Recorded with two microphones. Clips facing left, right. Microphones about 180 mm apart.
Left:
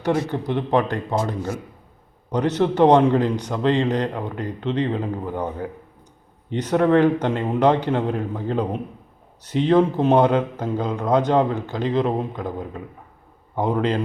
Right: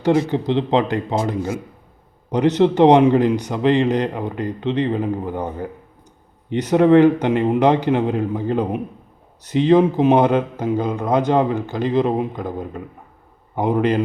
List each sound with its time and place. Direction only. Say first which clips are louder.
0.1 s a man's voice: right 5 dB; 20° right (ahead or behind); by 5.7 s 5° right (ahead or behind)
6.7 s a man's voice: right 5 dB; 15° right (ahead or behind)
9.4 s speech: right 3 dB; 85° right
9.6 s a man's voice: right 3 dB; 10° right (ahead or behind)